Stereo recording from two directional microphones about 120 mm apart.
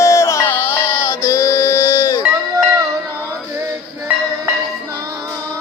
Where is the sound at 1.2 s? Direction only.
25° left (ahead or behind).